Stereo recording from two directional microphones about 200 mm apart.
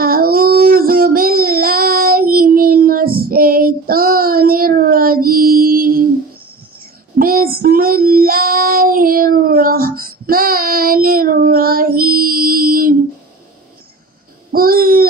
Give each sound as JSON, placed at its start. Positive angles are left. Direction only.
{"t": 0.0, "sound": "child singing", "side_deg": -45}
{"t": 7.2, "sound": "child singing", "side_deg": -45}
{"t": 14.5, "sound": "a sound", "side_deg": -45}